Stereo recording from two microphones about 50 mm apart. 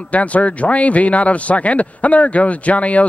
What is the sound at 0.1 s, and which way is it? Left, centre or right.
A man's voice, left.